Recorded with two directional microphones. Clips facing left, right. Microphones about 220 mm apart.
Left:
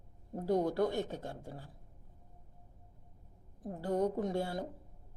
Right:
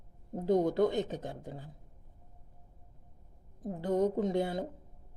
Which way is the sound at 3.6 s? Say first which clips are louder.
Right 3 dB; 20° right (ahead or behind).